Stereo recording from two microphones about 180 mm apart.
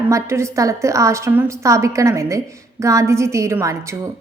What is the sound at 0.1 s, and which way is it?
A woman's voice, 15° right (ahead or behind).